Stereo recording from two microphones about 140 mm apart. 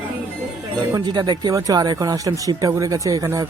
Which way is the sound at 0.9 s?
30° right (ahead or behind).